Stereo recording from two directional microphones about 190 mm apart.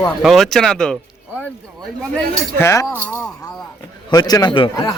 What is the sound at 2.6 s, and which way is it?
Speech, 15° left (ahead or behind).